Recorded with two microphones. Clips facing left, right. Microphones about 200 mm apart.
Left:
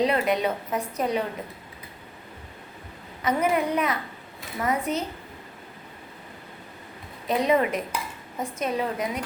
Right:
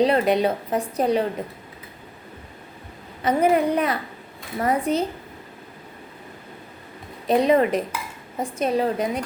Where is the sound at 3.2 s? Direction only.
30° right (ahead or behind).